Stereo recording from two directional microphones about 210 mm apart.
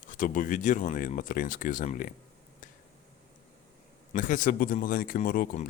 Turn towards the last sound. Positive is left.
turn(degrees=40)  # may be behind; listen again after turning